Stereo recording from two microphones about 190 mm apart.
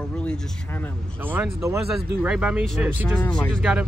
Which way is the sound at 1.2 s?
10° right (ahead or behind).